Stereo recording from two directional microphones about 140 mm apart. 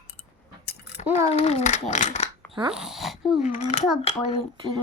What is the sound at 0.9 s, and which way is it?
A child's voice, 45° left (ahead or behind).